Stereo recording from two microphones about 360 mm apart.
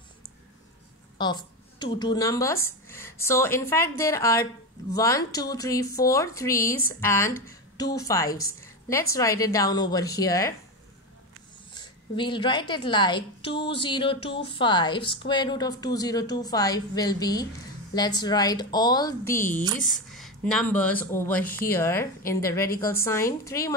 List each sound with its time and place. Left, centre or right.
1.1 s a woman's voice: centre
11.7 s a woman's voice: centre
22.7 s a woman's voice: left
22.9 s a woman's voice: centre